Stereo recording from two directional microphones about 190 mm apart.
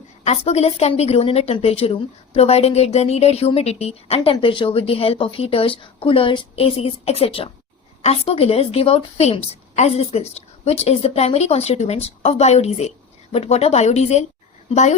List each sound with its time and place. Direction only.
0.3 s speech: 35° left (ahead or behind)